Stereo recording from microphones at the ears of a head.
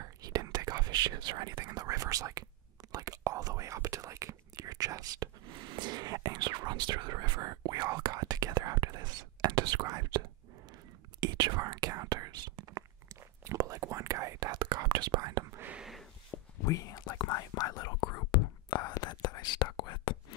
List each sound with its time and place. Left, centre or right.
0.0 s whispering: right
2.9 s speech: right
11.1 s whispering: right
16.3 s whispering: left